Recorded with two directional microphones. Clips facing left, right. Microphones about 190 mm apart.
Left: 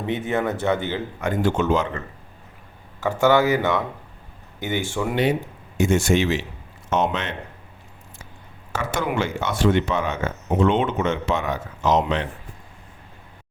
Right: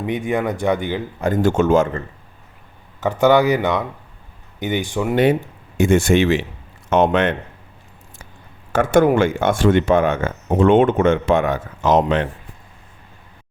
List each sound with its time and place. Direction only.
0.0 s speech: 15° right (ahead or behind)
1.2 s speech: 40° right (ahead or behind)
3.0 s speech: 20° right (ahead or behind)
5.1 s speech: 55° right (ahead or behind)
8.7 s speech: 50° right (ahead or behind)